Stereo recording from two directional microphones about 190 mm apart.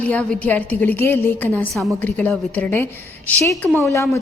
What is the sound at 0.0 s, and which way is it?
A woman's voice, 5° left (ahead or behind).